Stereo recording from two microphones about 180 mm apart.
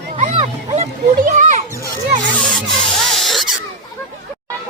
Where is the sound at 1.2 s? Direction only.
40° right (ahead or behind).